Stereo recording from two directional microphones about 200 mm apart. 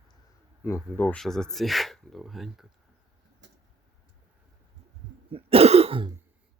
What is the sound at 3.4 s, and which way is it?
Vehicle, 65° right (ahead or behind).